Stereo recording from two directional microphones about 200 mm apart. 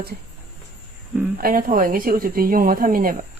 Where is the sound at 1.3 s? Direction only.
45° right (ahead or behind).